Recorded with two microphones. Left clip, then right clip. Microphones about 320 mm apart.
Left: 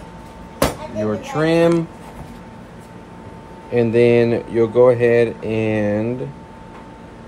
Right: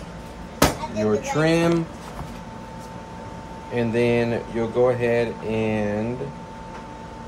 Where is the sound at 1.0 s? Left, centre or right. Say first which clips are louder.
Left 1 dB; centre.